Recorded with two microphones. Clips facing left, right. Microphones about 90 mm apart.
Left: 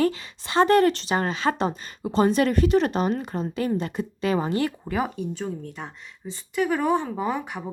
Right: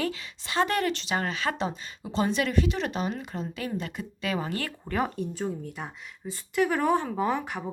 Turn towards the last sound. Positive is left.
turn(degrees=0)  # may be behind; listen again after turning